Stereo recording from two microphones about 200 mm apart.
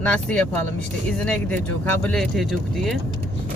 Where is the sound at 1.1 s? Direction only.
5° left (ahead or behind).